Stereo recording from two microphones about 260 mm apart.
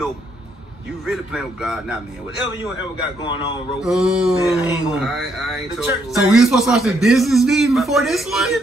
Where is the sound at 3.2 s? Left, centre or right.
Centre.